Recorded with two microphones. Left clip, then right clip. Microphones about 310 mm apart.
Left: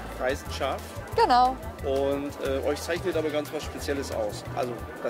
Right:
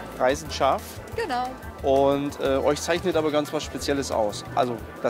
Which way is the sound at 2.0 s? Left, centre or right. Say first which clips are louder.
Right 4 dB; right.